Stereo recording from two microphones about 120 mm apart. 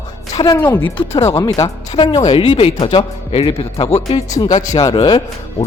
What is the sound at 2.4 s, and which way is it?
Speech, 50° left (ahead or behind).